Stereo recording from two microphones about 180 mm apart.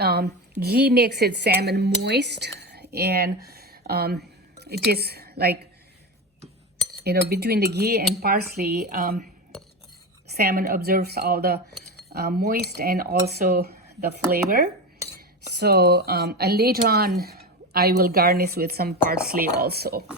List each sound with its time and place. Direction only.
0.0 s a woman's voice: 60° right (ahead or behind)
7.0 s a woman's voice: 60° right (ahead or behind); by 9.3 s 45° right (ahead or behind)
10.5 s a woman's voice: 60° right (ahead or behind)